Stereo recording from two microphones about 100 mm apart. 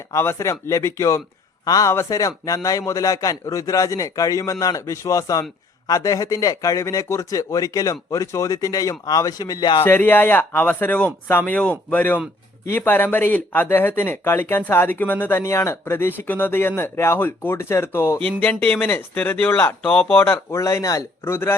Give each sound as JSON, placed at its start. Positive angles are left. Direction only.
{"t": 0.1, "sound": "a man's voice", "side_deg": 25}
{"t": 9.8, "sound": "speech", "side_deg": 20}
{"t": 18.3, "sound": "speech", "side_deg": 15}
{"t": 20.6, "sound": "a man's voice", "side_deg": 35}